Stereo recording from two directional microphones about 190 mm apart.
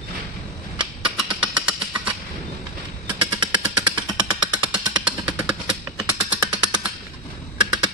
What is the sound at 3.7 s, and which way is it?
Jackhammer, 5° right (ahead or behind).